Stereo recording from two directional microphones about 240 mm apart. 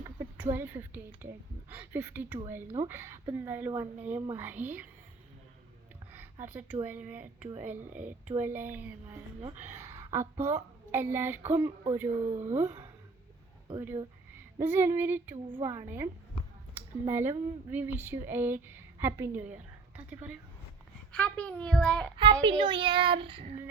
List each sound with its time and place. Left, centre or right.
0.0 s a sound: centre
0.5 s speech: centre
6.1 s a woman's voice: centre
21.1 s a woman's voice: centre
22.2 s speech: centre